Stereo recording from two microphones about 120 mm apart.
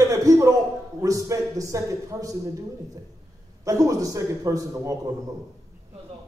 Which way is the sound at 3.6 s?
30° right (ahead or behind).